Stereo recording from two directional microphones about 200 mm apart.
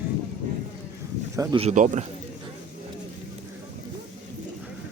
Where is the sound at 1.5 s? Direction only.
35° right (ahead or behind).